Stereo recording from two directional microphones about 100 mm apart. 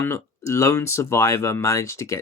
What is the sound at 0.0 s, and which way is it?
Speech, 30° left (ahead or behind).